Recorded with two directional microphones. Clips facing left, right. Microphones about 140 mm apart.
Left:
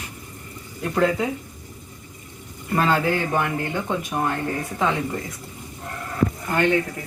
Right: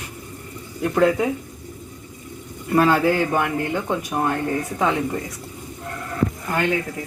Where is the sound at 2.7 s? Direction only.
10° right (ahead or behind).